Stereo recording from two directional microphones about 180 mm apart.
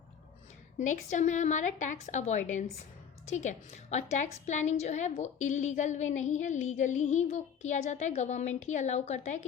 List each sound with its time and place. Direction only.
0.8 s a woman's voice: 40° left (ahead or behind)